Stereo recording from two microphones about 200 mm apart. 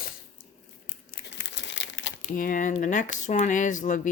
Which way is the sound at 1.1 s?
60° left (ahead or behind).